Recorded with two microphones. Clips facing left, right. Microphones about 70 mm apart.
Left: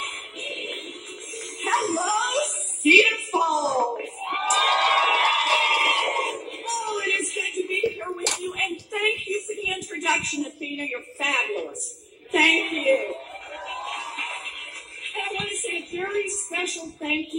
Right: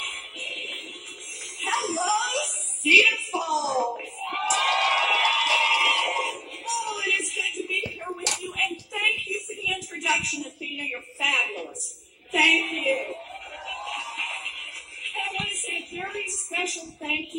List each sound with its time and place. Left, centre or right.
0.0 s music: left
1.6 s a sound: left
11.2 s speech: left
13.7 s music: left
15.1 s a woman's voice: left